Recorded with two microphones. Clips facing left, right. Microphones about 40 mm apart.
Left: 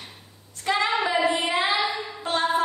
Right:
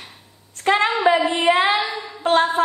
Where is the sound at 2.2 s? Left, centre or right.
Right.